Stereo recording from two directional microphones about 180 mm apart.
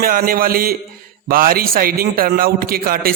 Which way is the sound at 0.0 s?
55° right (ahead or behind).